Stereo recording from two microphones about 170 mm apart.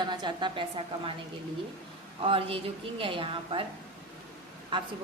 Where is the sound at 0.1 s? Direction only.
25° right (ahead or behind).